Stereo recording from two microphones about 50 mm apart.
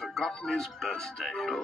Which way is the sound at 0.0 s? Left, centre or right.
Centre.